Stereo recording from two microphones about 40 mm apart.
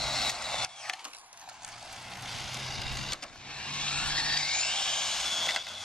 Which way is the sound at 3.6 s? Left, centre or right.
Left.